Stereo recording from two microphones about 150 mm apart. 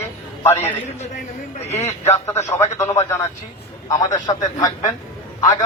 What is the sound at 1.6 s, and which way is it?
Speech, 45° left (ahead or behind).